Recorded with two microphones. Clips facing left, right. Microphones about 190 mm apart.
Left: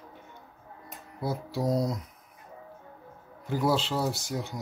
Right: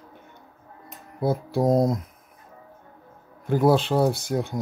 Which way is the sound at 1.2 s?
55° right (ahead or behind).